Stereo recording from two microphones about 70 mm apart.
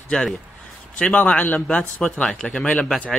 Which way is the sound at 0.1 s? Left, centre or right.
Centre.